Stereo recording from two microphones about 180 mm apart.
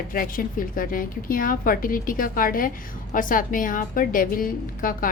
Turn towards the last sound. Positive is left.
turn(degrees=50)  # may be behind; listen again after turning